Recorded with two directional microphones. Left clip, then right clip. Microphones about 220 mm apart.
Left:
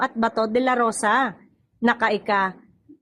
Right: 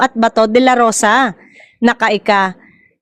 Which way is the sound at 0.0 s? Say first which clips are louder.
Right 10 dB; 35° right (ahead or behind).